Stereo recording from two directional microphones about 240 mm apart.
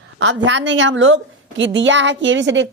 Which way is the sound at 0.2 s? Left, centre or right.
Right.